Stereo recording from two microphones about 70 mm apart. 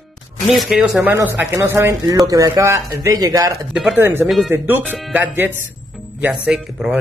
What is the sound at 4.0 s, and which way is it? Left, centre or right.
Speech, right.